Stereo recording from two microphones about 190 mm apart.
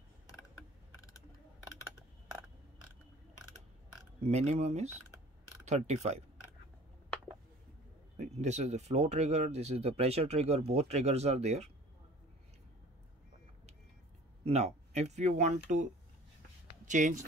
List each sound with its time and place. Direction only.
4.3 s speech: 35° right (ahead or behind)
8.2 s speech: 35° right (ahead or behind)
14.4 s speech: 35° right (ahead or behind)